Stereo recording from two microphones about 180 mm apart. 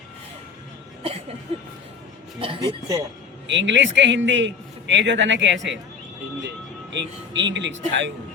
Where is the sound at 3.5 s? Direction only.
90° right.